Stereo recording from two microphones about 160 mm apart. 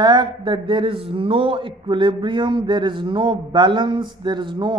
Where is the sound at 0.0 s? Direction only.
30° right (ahead or behind).